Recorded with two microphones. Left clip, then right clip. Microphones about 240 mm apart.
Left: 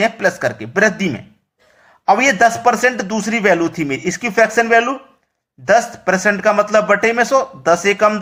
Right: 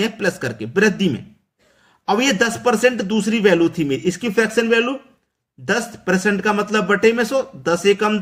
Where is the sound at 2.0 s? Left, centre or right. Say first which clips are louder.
Left 6 dB; centre.